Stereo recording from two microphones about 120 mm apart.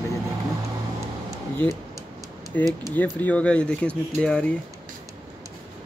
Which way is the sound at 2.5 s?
15° left (ahead or behind).